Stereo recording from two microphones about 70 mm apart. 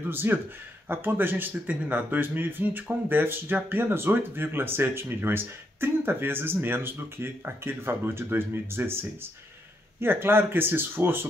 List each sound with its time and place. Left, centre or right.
0.1 s speech: right